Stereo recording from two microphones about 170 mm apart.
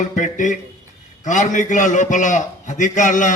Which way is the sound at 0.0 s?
50° left (ahead or behind).